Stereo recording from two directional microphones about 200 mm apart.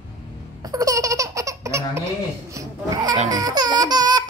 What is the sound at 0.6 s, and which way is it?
Laughter, 15° right (ahead or behind).